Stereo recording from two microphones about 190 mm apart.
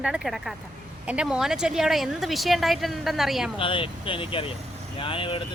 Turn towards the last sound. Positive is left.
turn(degrees=25)  # may be behind; listen again after turning